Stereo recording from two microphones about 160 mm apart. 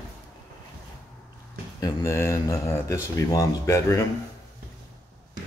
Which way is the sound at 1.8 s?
25° left (ahead or behind).